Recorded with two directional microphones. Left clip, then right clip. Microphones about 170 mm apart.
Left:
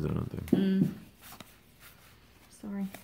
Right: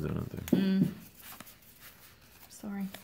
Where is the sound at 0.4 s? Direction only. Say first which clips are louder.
Even; 10° left (ahead or behind).